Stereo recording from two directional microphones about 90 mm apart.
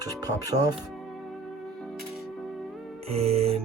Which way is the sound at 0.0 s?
45° right (ahead or behind).